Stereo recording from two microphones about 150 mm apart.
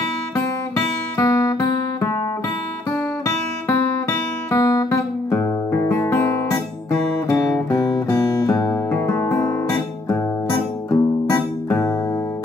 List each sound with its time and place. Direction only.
0.4 s guitar: 15° left (ahead or behind)
1.2 s music: 25° left (ahead or behind)
4.5 s guitar: 25° left (ahead or behind)